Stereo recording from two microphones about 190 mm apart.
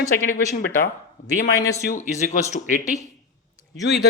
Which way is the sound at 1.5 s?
15° left (ahead or behind).